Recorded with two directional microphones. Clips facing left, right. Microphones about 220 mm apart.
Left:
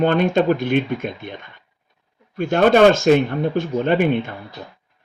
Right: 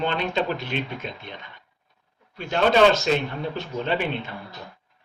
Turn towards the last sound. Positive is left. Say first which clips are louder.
# left 8 dB
turn(degrees=50)  # may be behind; listen again after turning